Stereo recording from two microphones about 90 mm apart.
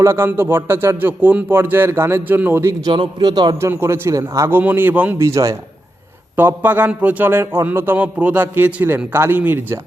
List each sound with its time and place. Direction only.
0.0 s speech: 30° right (ahead or behind)
2.9 s speech: 65° right (ahead or behind)
3.6 s speech: 25° right (ahead or behind)
4.4 s speech: 20° right (ahead or behind)
5.2 s a man's voice: 35° right (ahead or behind)
6.3 s speech: 20° right (ahead or behind)